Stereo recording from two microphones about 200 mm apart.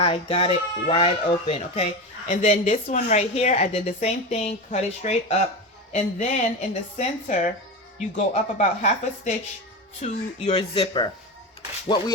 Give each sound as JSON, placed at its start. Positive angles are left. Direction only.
{"t": 0.0, "sound": "speech", "side_deg": 30}
{"t": 2.2, "sound": "a woman's voice", "side_deg": 40}